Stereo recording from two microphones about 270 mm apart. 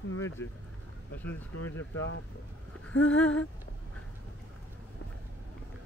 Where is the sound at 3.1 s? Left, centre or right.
Centre.